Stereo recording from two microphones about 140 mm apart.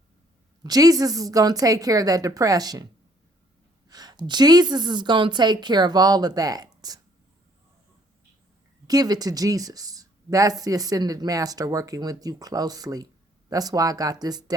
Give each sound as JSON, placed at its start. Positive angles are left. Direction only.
{"t": 0.6, "sound": "speech", "side_deg": -25}
{"t": 3.8, "sound": "speech", "side_deg": -30}
{"t": 8.9, "sound": "speech", "side_deg": -25}